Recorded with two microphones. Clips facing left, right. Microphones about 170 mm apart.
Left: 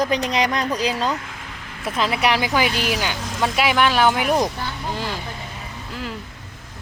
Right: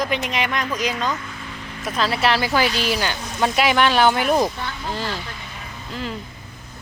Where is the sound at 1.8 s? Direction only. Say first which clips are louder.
Even; 20° left (ahead or behind).